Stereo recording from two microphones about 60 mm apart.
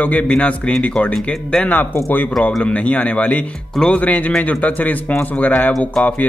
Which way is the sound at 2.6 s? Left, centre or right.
Left.